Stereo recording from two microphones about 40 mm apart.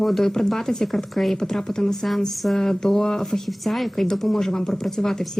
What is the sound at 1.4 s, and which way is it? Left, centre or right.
Speech, centre.